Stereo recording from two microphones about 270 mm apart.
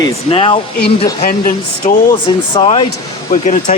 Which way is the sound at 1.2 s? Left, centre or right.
Left.